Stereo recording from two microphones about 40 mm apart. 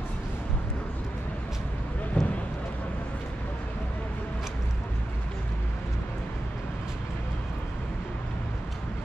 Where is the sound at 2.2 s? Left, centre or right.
Left.